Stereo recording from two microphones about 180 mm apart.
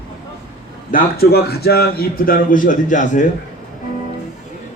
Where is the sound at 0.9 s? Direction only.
60° left (ahead or behind).